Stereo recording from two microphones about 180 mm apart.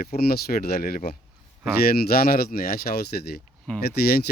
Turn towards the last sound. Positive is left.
turn(degrees=60)  # may be behind; listen again after turning